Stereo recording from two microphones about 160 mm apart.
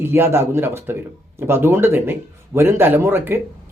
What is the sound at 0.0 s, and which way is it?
Speech, 15° right (ahead or behind).